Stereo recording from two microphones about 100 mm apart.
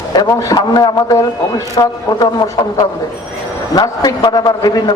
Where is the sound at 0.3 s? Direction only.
35° left (ahead or behind).